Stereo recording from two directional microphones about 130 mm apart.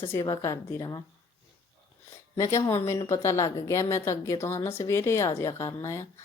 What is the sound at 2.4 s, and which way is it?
A woman's voice, 25° left (ahead or behind).